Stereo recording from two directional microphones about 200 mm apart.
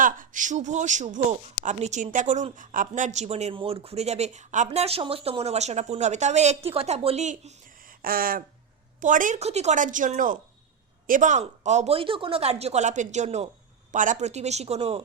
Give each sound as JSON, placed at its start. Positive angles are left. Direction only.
{"t": 0.0, "sound": "a woman's voice", "side_deg": -40}